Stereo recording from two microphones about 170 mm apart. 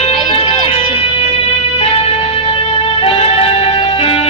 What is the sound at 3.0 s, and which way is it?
Music, 35° left (ahead or behind).